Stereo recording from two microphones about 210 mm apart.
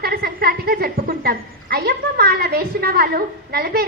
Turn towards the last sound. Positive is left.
turn(degrees=-50)  # may be behind; listen again after turning